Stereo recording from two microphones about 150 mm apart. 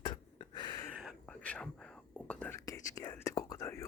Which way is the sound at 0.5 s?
30° left (ahead or behind).